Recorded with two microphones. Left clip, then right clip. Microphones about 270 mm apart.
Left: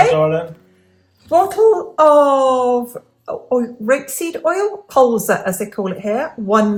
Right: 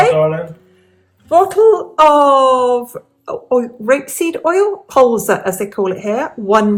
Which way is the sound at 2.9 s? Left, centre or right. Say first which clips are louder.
Right 2 dB; right.